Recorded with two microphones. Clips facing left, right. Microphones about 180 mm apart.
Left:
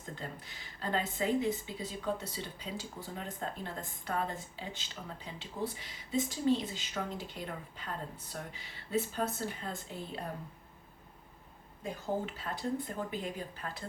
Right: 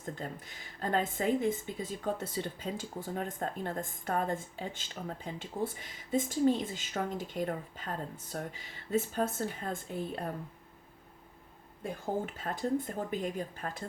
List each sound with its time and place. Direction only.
0.2 s speech: 50° right (ahead or behind)
11.8 s speech: 50° right (ahead or behind)